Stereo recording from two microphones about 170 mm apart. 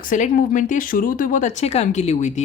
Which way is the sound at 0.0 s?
55° left (ahead or behind).